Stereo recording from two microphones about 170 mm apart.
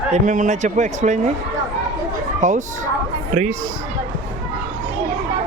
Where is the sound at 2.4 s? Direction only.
45° right (ahead or behind).